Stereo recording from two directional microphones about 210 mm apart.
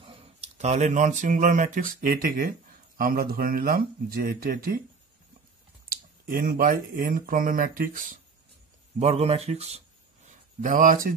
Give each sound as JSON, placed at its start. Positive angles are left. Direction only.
{"t": 0.0, "sound": "speech", "side_deg": -25}
{"t": 5.9, "sound": "speech", "side_deg": -45}